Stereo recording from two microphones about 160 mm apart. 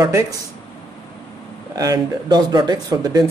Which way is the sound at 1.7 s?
20° right (ahead or behind).